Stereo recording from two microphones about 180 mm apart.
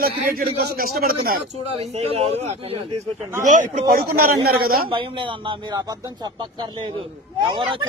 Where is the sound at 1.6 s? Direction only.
35° right (ahead or behind).